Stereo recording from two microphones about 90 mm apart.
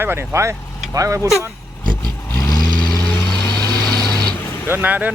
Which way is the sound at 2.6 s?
50° right (ahead or behind).